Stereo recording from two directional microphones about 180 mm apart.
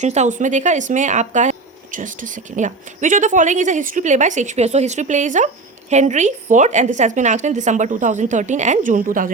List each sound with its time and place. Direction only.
0.0 s a woman's voice: 40° right (ahead or behind)